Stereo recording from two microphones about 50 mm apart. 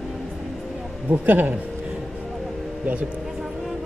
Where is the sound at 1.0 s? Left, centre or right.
Right.